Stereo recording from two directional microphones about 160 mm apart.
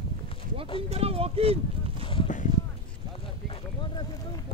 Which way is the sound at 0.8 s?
40° right (ahead or behind).